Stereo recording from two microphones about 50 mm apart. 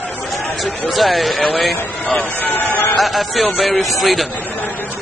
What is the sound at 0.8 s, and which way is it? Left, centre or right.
Speech, centre.